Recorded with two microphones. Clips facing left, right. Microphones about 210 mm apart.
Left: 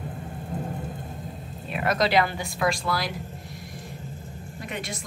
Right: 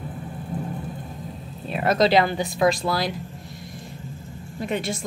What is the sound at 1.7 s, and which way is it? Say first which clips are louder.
A woman's voice: right 5 dB; 30° right (ahead or behind).